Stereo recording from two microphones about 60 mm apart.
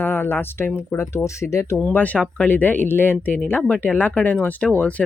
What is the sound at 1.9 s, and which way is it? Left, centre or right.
Speech, left.